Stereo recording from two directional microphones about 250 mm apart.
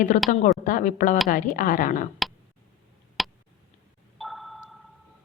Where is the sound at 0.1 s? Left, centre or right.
Left.